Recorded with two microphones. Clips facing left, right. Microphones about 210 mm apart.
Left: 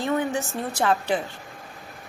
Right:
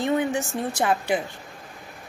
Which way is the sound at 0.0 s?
15° right (ahead or behind).